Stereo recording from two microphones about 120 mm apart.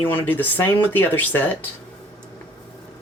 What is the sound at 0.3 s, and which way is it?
Speech, 15° left (ahead or behind).